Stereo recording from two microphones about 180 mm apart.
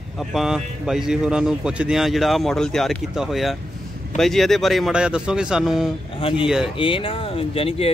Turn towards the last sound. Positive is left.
turn(degrees=30)  # may be behind; listen again after turning